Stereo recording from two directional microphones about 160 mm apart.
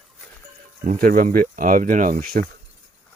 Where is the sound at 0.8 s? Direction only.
60° right (ahead or behind).